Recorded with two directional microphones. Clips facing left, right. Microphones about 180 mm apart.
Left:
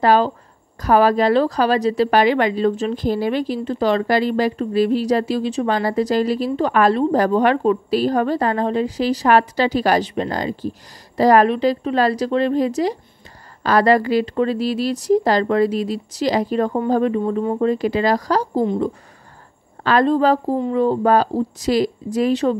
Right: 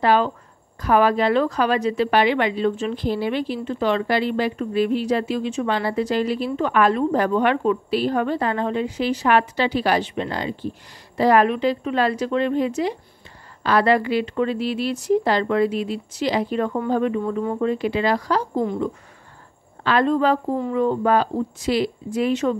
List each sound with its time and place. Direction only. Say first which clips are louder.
0.0 s a woman's voice: left 3 dB; 40° left (ahead or behind)
19.8 s a woman's voice: left 3 dB; 40° left (ahead or behind)